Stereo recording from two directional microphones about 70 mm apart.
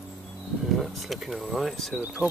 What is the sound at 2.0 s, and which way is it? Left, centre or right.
Speech, centre.